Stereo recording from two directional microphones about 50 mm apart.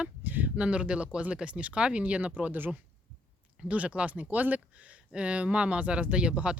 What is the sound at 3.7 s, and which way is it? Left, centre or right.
Speech, right.